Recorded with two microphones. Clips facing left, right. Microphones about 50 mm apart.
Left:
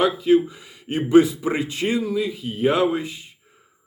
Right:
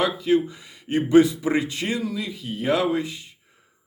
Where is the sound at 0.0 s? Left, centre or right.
Centre.